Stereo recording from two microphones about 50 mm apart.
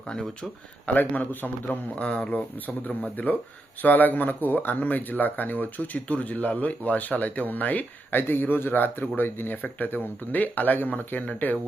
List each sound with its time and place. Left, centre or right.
0.9 s speech: left
2.0 s speech: left
2.6 s speech: left
8.1 s speech: left